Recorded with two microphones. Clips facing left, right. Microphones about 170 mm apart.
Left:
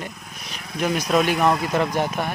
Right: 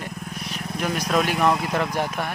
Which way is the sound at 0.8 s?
5° left (ahead or behind).